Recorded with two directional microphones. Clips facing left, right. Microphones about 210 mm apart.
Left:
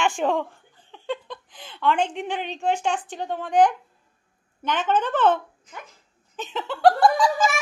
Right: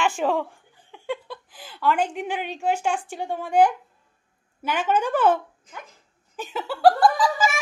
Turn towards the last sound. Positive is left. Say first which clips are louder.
# left 1 dB
turn(degrees=-5)  # may be behind; listen again after turning